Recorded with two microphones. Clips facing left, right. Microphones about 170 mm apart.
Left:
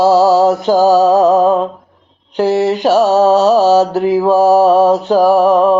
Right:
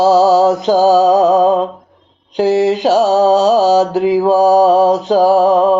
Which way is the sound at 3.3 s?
15° right (ahead or behind).